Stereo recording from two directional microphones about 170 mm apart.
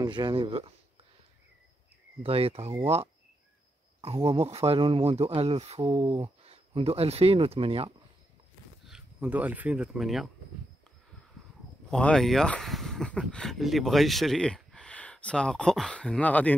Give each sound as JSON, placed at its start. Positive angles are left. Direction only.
{"t": 0.0, "sound": "speech", "side_deg": -25}
{"t": 2.2, "sound": "speech", "side_deg": -35}
{"t": 4.0, "sound": "speech", "side_deg": -35}
{"t": 8.8, "sound": "speech", "side_deg": -5}
{"t": 11.9, "sound": "speech", "side_deg": 5}